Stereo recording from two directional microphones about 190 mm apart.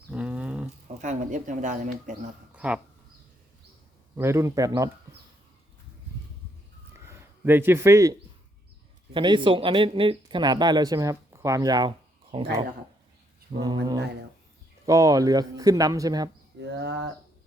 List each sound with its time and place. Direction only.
0.1 s a sound: 5° right (ahead or behind)
1.0 s speech: 40° right (ahead or behind)
2.5 s a sound: 5° right (ahead or behind)
4.2 s a man's voice: 15° right (ahead or behind)
7.1 s a man's voice: 10° right (ahead or behind)
9.1 s speech: 25° right (ahead or behind)
13.5 s a man's voice: 15° right (ahead or behind)
14.8 s a man's voice: 15° right (ahead or behind)
16.7 s speech: 65° right (ahead or behind)